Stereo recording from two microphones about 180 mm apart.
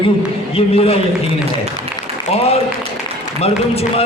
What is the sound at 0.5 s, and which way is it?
Speech, 35° left (ahead or behind).